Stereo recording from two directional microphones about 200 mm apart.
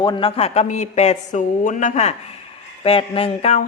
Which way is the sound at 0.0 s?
25° left (ahead or behind).